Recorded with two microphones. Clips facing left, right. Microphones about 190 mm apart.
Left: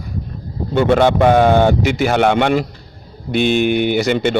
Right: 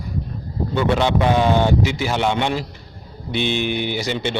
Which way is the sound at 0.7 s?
50° left (ahead or behind).